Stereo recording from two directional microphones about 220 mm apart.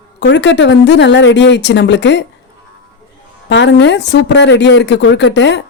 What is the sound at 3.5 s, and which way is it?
Speech, 55° left (ahead or behind).